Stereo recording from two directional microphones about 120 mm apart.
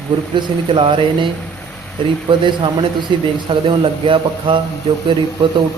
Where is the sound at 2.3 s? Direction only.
40° right (ahead or behind).